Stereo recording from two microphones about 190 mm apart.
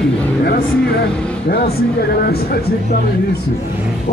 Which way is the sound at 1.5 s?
55° left (ahead or behind).